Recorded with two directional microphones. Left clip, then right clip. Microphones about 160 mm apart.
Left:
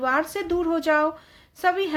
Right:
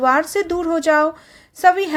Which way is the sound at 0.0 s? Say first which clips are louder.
Right 7 dB; 40° right (ahead or behind).